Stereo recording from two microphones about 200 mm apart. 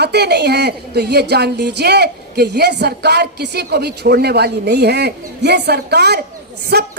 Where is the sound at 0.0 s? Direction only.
55° right (ahead or behind).